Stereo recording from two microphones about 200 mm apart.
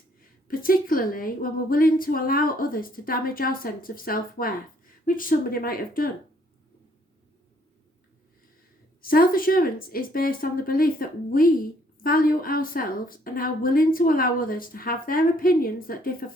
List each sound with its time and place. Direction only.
0.4 s speech: 45° left (ahead or behind)
9.0 s speech: 45° left (ahead or behind)